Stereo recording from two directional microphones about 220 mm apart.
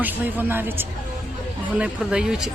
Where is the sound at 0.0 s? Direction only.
10° right (ahead or behind).